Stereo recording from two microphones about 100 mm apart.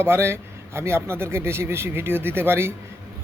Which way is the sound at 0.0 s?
25° right (ahead or behind).